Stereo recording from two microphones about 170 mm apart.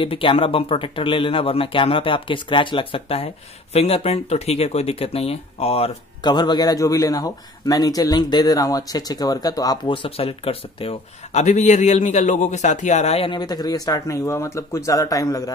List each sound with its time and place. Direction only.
0.0 s speech: 30° left (ahead or behind)